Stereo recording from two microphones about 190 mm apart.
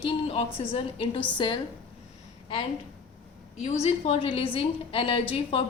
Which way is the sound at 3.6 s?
35° left (ahead or behind).